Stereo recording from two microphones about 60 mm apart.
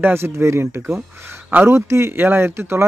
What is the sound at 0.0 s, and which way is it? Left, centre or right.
Speech, right.